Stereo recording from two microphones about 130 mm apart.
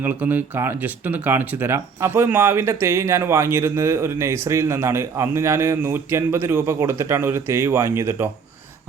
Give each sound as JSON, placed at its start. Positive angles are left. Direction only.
{"t": 0.0, "sound": "speech", "side_deg": -15}